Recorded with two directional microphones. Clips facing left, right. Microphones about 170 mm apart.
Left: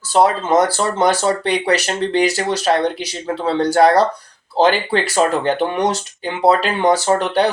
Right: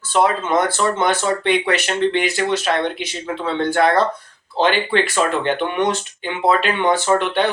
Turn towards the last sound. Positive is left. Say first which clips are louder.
# left 2 dB
turn(degrees=40)  # may be behind; listen again after turning